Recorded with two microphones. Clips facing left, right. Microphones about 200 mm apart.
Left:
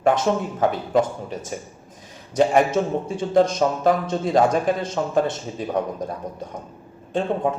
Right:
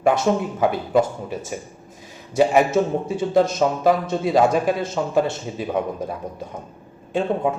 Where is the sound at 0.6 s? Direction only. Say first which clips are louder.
Right 1 dB; 10° right (ahead or behind).